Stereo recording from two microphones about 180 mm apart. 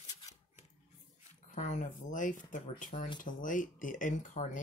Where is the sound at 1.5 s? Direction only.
45° left (ahead or behind).